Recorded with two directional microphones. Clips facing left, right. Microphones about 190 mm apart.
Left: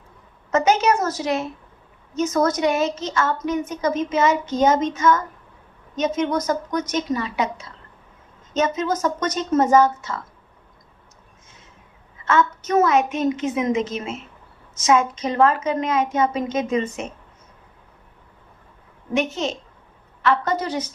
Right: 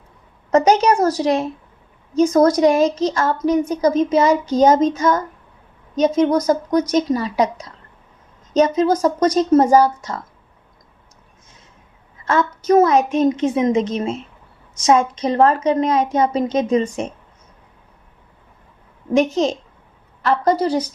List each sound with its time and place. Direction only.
0.5 s a woman's voice: 35° right (ahead or behind)
12.2 s a woman's voice: 35° right (ahead or behind)
19.1 s a woman's voice: 40° right (ahead or behind)